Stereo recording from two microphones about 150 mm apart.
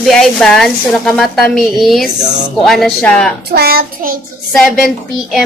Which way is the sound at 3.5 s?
90° right.